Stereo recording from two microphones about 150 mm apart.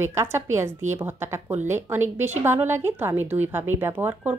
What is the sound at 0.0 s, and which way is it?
A woman's voice, 15° right (ahead or behind).